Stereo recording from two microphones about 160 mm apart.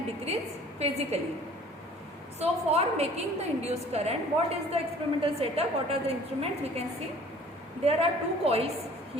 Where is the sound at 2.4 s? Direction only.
40° right (ahead or behind).